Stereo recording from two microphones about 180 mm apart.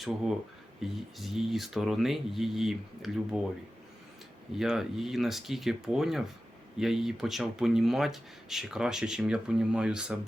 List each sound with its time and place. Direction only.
0.8 s speech: centre (ahead or behind)
4.5 s speech: centre (ahead or behind)